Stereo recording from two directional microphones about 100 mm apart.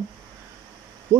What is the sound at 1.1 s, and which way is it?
Hum, 25° right (ahead or behind).